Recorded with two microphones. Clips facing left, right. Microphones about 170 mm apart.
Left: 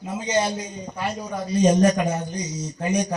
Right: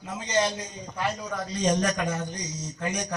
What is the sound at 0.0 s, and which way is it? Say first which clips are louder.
A man's voice: left 3 dB; 10° left (ahead or behind).